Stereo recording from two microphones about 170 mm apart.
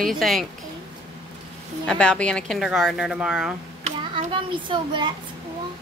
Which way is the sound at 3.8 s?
35° right (ahead or behind).